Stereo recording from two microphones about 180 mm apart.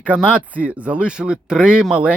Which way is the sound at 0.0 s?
5° right (ahead or behind).